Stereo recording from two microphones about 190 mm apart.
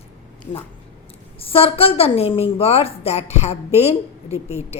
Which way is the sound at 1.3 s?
30° left (ahead or behind).